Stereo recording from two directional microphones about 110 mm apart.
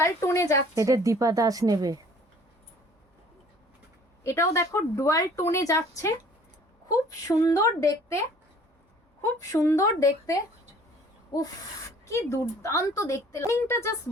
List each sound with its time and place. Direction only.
0.0 s speech: 25° left (ahead or behind)
0.8 s speech: 30° right (ahead or behind)
4.2 s speech: 25° left (ahead or behind)
9.2 s speech: 25° left (ahead or behind)
12.0 s speech: 25° left (ahead or behind)